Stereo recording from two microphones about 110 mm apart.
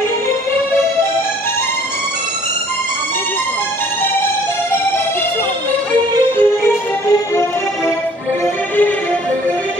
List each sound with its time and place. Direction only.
6.3 s music: 25° left (ahead or behind)